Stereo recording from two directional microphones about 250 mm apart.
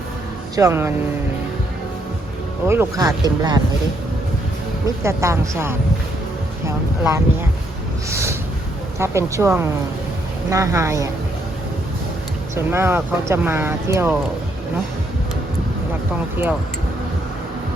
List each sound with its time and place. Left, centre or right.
0.5 s speech: centre
2.6 s speech: centre
5.0 s speech: centre
8.1 s snort: centre
9.0 s speech: centre
12.5 s speech: centre